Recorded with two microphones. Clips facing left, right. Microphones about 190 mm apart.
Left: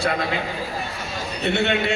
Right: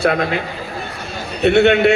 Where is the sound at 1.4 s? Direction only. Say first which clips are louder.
Right 10 dB; 65° right (ahead or behind).